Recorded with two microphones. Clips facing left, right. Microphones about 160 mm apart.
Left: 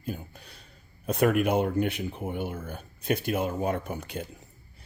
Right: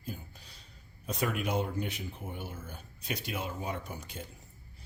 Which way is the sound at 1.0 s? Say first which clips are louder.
Left 10 dB; 55° left (ahead or behind).